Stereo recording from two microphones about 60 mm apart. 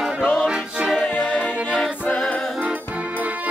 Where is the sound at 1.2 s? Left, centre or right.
Left.